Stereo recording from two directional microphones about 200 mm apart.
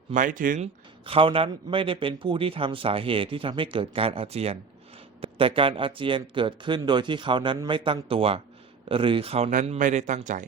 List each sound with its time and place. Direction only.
0.1 s speech: 40° right (ahead or behind)
1.0 s a man's voice: 25° right (ahead or behind)